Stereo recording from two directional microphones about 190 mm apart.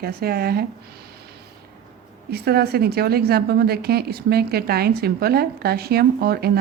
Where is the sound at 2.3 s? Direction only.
55° right (ahead or behind).